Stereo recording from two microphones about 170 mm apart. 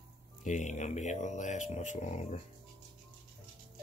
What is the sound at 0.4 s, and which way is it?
Speech, 45° left (ahead or behind).